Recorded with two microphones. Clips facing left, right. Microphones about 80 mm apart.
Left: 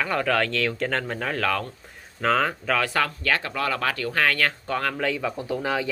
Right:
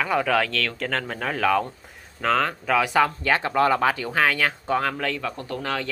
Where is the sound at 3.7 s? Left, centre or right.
Centre.